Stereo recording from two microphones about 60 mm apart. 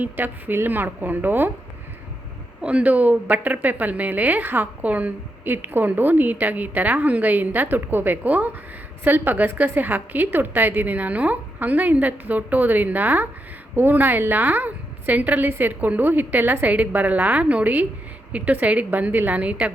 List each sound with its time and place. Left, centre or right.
0.0 s a woman's voice: right
2.6 s a woman's voice: right